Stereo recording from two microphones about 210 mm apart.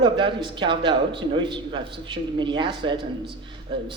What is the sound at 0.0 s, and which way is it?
A man's voice, 20° right (ahead or behind).